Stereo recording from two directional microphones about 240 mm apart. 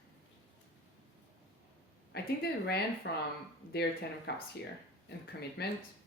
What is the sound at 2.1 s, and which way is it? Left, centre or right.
Speech, left.